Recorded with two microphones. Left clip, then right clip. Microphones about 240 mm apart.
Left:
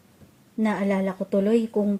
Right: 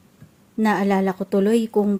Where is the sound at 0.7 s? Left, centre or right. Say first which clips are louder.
Right 6 dB; right.